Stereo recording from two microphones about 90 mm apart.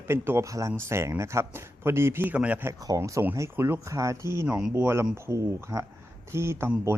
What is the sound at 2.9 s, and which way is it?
A man's voice, 35° right (ahead or behind).